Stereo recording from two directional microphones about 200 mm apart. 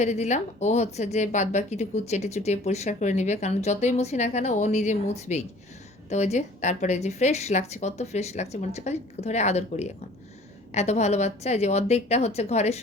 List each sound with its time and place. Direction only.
0.0 s speech: 35° left (ahead or behind)